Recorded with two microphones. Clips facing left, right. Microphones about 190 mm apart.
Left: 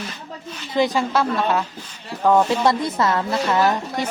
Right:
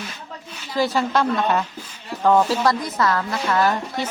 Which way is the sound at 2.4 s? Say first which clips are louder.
Left 2 dB; 25° left (ahead or behind).